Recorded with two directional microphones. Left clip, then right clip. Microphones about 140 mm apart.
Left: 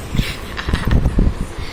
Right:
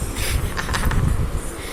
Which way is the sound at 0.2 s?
15° right (ahead or behind).